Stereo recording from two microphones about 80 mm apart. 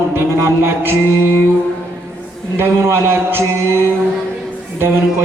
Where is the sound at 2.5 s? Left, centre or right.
Right.